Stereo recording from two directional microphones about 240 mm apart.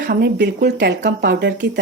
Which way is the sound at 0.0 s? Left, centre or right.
Right.